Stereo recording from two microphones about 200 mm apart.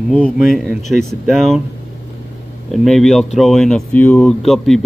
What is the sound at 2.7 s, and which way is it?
Speech, centre (ahead or behind).